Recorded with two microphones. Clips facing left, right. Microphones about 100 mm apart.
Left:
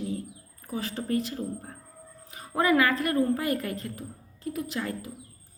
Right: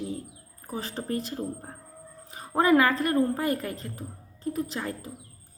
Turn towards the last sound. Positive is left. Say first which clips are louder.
# right 1 dB
turn(degrees=-35)  # may be behind; listen again after turning